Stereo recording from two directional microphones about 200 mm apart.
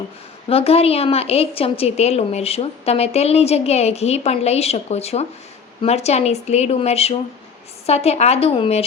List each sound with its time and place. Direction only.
0.4 s a woman's voice: 30° left (ahead or behind)